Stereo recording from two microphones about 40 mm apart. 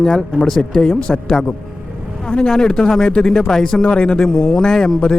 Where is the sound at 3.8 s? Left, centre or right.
Left.